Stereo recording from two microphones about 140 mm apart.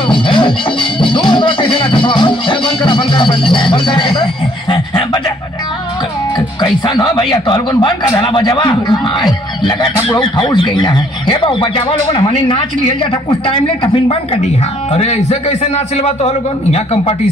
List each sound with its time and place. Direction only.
0.0 s music: 35° left (ahead or behind)
6.3 s a man's voice: 30° left (ahead or behind)
14.0 s a man's voice: 45° left (ahead or behind)